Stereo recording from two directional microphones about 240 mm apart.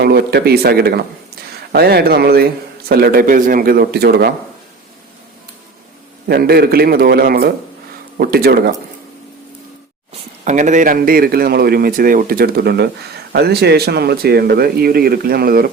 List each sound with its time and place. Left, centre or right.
0.0 s a man's voice: right
6.2 s a man's voice: right
10.4 s a man's voice: right